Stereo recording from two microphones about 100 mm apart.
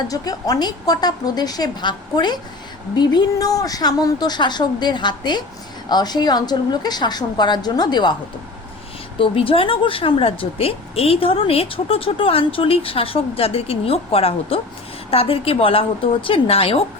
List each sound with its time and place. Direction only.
0.1 s a woman's voice: 40° left (ahead or behind)
9.1 s speech: 65° left (ahead or behind)